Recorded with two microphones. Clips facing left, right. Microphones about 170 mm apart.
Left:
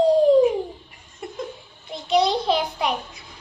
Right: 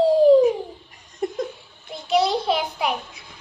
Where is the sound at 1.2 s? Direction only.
45° right (ahead or behind).